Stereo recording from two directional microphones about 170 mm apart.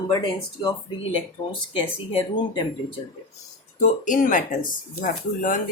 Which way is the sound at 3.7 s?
50° left (ahead or behind).